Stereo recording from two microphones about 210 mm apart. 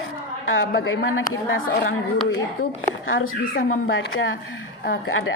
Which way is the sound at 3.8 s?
70° left (ahead or behind).